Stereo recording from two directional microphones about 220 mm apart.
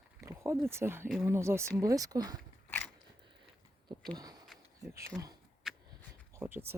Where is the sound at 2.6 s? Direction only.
10° left (ahead or behind).